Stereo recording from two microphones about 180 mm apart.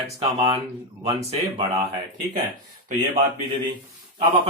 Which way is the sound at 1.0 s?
30° right (ahead or behind).